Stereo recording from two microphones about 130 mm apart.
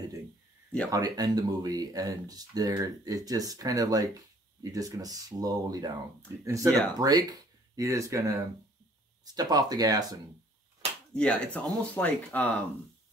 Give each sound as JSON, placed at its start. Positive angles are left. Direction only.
{"t": 0.8, "sound": "speech", "side_deg": -30}
{"t": 11.1, "sound": "speech", "side_deg": 10}